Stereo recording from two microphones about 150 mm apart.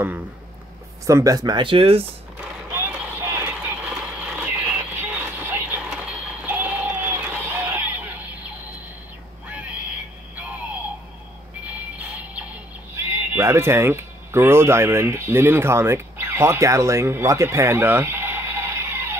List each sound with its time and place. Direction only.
1.0 s speech: 20° right (ahead or behind); by 2.0 s 40° right (ahead or behind)
2.7 s vehicle: 15° right (ahead or behind)
6.4 s a sound: 10° right (ahead or behind)
12.9 s speech: 15° right (ahead or behind)